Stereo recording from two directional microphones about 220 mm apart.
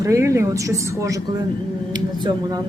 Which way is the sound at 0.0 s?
15° right (ahead or behind).